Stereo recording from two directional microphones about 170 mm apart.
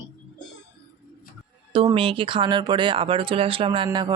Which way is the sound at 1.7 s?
35° right (ahead or behind).